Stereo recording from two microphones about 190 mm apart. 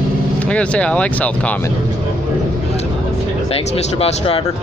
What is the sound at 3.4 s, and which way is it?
Speech, 30° left (ahead or behind).